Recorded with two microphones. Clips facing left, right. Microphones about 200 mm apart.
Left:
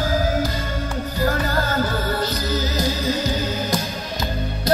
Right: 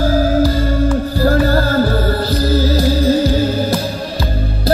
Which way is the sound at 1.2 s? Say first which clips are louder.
Right 8 dB; 35° right (ahead or behind).